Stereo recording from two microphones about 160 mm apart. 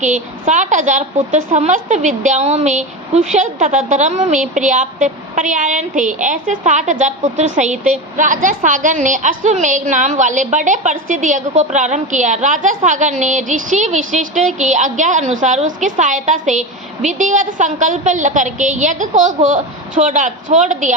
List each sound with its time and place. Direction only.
0.0 s a woman's voice: 50° right (ahead or behind)